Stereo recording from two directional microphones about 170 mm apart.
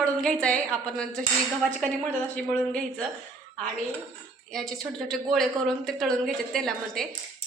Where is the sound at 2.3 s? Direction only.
5° left (ahead or behind).